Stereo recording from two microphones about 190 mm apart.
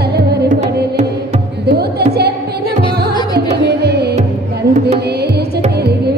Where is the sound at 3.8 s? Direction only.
60° right (ahead or behind).